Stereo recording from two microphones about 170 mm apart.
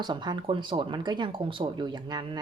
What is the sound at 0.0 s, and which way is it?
Speech, 25° right (ahead or behind).